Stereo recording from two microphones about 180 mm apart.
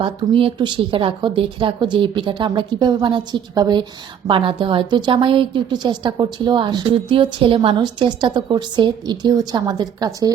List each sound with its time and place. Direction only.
0.0 s a woman's voice: 30° right (ahead or behind)